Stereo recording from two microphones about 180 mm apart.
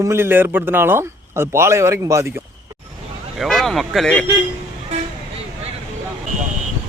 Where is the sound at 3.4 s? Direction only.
Centre (ahead or behind).